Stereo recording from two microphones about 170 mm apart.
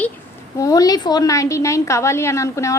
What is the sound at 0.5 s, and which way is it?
A woman's voice, 20° left (ahead or behind).